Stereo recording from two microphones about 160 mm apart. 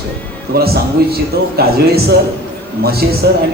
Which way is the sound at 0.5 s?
75° right (ahead or behind).